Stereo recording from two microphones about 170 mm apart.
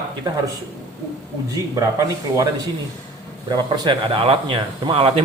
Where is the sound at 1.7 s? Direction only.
20° right (ahead or behind).